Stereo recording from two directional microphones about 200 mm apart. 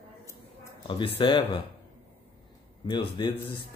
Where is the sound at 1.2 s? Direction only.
25° left (ahead or behind).